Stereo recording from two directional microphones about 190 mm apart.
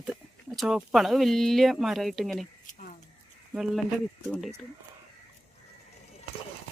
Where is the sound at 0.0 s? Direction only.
Centre (ahead or behind).